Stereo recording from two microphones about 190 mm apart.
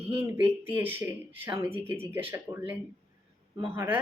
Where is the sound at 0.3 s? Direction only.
10° right (ahead or behind).